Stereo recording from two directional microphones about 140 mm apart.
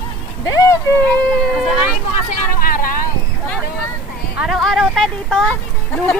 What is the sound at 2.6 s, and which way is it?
Vehicle, 90° left.